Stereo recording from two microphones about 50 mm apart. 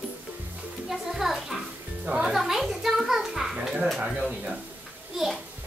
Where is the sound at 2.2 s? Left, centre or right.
Centre.